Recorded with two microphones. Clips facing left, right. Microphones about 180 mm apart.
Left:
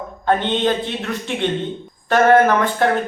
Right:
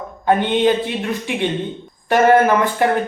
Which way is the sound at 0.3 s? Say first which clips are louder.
Right 3 dB; 10° right (ahead or behind).